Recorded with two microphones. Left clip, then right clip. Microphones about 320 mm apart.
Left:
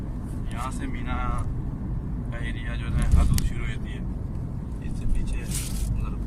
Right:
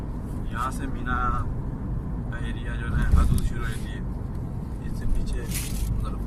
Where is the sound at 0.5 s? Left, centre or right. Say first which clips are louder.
Right 4 dB; centre.